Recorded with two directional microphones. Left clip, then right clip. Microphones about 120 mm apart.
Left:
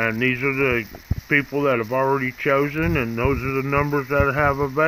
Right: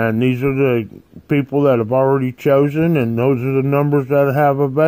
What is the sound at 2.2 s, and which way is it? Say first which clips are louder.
Speech: right 6 dB; 40° right (ahead or behind).